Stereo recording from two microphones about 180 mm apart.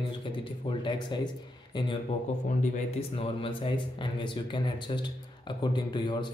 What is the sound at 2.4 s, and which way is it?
Speech, 45° left (ahead or behind).